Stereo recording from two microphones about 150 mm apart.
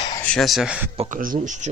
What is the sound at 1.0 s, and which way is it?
Speech, 65° right (ahead or behind).